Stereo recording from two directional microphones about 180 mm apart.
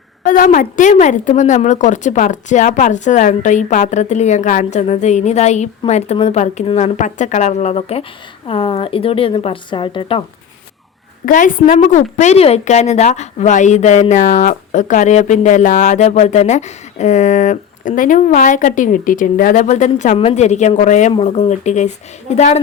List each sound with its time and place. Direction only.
0.2 s a woman's voice: 50° left (ahead or behind); by 10.2 s 30° left (ahead or behind)
11.3 s a woman's voice: 45° left (ahead or behind)